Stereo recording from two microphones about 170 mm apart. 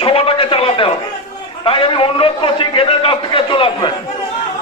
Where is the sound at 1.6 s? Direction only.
30° left (ahead or behind).